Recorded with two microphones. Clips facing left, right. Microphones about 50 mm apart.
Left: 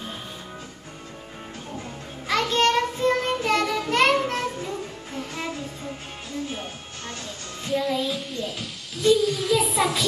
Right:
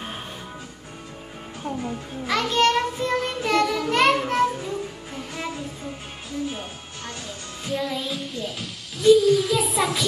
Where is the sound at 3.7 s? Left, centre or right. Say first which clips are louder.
Right 1 dB; right.